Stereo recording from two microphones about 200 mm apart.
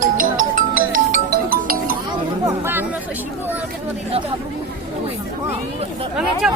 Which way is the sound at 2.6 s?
10° right (ahead or behind).